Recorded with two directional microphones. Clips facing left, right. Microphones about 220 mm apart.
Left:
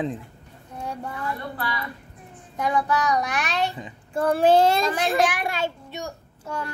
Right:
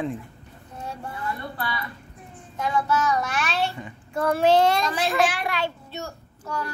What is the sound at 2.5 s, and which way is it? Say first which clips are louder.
A child's voice: left 1 dB; 15° left (ahead or behind).